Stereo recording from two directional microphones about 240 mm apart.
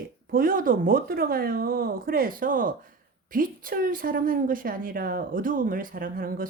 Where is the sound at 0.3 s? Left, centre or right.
Right.